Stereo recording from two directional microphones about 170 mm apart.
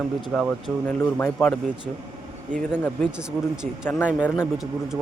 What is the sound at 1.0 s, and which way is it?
Speech, 15° left (ahead or behind).